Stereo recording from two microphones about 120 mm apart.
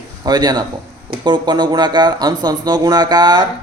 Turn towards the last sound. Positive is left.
turn(degrees=-35)  # may be behind; listen again after turning